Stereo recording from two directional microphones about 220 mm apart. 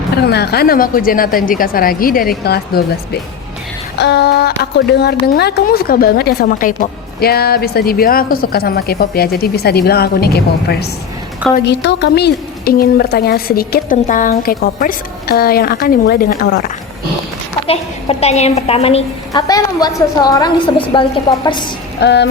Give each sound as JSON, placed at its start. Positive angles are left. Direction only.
{"t": 0.3, "sound": "speech", "side_deg": 45}
{"t": 17.7, "sound": "a woman's voice", "side_deg": 25}
{"t": 22.0, "sound": "speech", "side_deg": 50}